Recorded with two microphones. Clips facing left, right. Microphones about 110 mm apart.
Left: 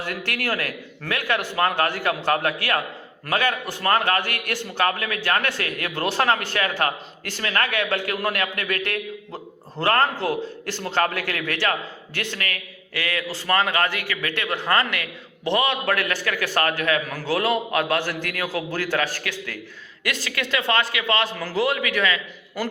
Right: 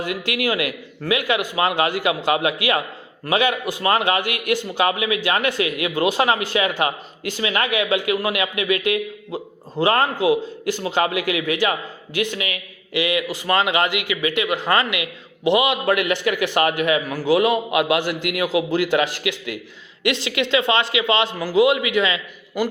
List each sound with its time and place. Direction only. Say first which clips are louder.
0.0 s a man's voice: right 5 dB; 15° right (ahead or behind)